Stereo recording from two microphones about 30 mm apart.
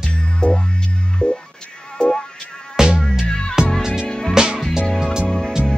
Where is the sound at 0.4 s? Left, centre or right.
Left.